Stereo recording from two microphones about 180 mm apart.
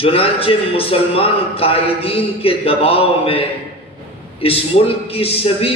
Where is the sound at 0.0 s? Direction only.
30° left (ahead or behind).